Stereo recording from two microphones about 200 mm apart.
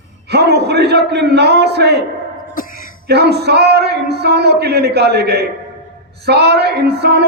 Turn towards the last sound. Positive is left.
turn(degrees=-55)  # may be behind; listen again after turning